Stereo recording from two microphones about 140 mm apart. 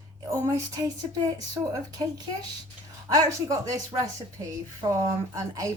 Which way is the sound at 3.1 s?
25° right (ahead or behind).